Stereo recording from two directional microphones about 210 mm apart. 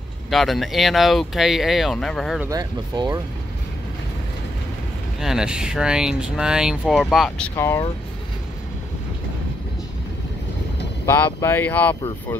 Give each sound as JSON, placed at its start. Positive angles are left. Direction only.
{"t": 0.3, "sound": "speech", "side_deg": 0}
{"t": 2.5, "sound": "speech", "side_deg": -15}
{"t": 5.2, "sound": "speech", "side_deg": -5}
{"t": 11.1, "sound": "speech", "side_deg": 10}